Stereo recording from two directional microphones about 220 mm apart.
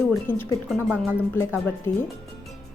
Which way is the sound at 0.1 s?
10° left (ahead or behind).